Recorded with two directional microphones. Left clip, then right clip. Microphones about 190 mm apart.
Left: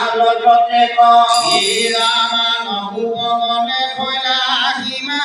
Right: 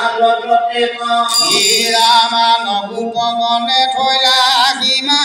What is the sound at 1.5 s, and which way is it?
Chant, 40° right (ahead or behind).